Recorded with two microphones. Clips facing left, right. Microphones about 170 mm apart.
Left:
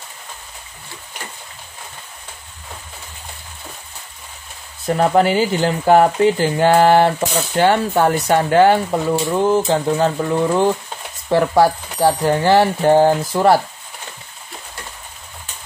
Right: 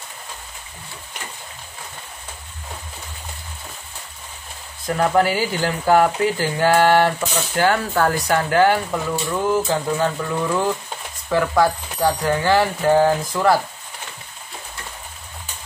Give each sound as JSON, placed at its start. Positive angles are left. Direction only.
{"t": 4.8, "sound": "speech", "side_deg": 25}